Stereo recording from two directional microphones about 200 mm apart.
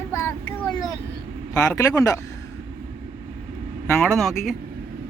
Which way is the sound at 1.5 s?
15° left (ahead or behind).